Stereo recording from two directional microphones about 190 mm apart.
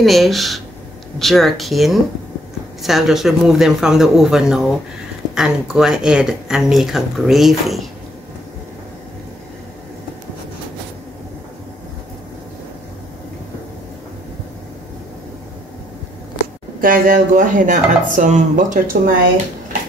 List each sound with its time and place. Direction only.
0.0 s speech: centre (ahead or behind)
16.8 s speech: 45° right (ahead or behind)